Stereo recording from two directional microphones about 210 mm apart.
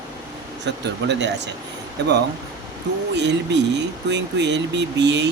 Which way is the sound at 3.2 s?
55° right (ahead or behind).